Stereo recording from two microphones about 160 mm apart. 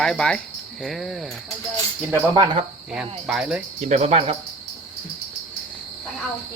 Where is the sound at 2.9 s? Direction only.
5° right (ahead or behind).